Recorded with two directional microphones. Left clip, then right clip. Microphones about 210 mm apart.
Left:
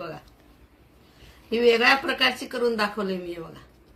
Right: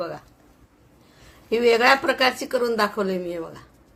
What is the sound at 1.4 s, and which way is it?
Speech, 50° right (ahead or behind).